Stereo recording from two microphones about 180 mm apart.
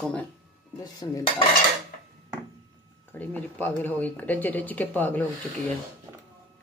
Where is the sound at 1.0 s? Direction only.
20° left (ahead or behind).